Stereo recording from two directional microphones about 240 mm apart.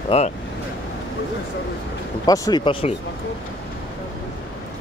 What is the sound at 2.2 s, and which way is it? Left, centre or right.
Speech, centre.